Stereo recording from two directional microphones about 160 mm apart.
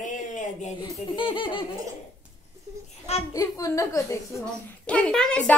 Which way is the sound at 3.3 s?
20° left (ahead or behind).